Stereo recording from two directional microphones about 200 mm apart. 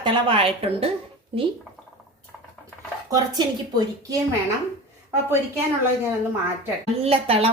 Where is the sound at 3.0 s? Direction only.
20° right (ahead or behind).